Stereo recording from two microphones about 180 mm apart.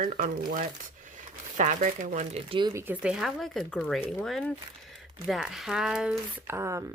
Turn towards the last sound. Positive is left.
turn(degrees=-15)  # may be behind; listen again after turning